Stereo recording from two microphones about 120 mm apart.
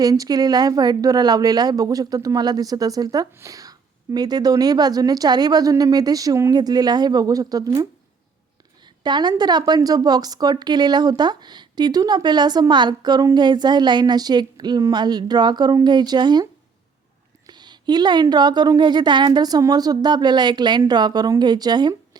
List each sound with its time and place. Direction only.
0.0 s speech: 30° right (ahead or behind)
9.0 s speech: 40° right (ahead or behind)